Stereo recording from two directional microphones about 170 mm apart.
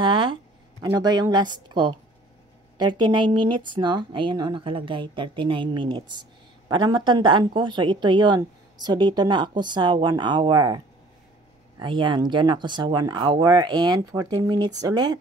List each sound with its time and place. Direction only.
0.0 s a woman's voice: 30° right (ahead or behind)
11.8 s a woman's voice: 30° right (ahead or behind)